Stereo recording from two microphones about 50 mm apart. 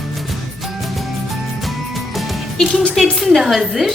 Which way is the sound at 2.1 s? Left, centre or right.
Centre.